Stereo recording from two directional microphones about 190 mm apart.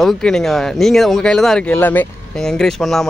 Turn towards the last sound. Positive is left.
turn(degrees=0)  # may be behind; listen again after turning